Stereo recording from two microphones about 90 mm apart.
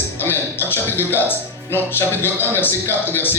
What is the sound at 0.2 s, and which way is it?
Speech, 25° left (ahead or behind).